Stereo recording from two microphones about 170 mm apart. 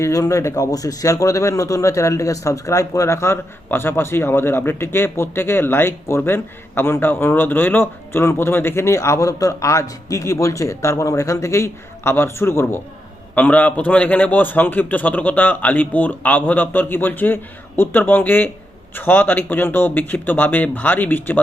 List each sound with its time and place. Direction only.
0.0 s a man's voice: 20° left (ahead or behind)